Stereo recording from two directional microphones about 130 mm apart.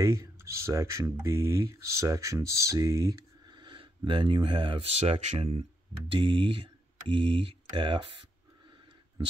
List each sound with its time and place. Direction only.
0.0 s speech: 20° right (ahead or behind); by 8.1 s 40° right (ahead or behind)